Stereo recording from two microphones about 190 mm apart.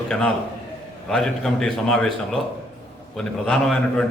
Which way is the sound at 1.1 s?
5° left (ahead or behind).